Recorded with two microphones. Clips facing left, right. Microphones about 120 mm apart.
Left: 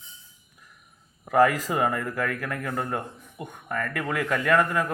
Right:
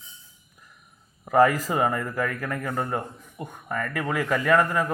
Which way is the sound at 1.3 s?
5° right (ahead or behind).